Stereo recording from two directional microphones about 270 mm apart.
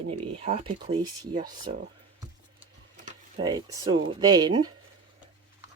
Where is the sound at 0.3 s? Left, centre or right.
Right.